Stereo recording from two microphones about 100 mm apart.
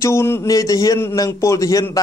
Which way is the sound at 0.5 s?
35° left (ahead or behind).